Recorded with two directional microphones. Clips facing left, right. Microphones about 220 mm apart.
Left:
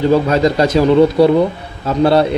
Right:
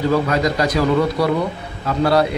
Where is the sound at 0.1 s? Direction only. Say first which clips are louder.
Left 5 dB; 25° left (ahead or behind).